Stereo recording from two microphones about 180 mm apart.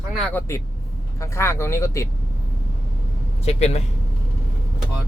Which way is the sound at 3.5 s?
35° left (ahead or behind).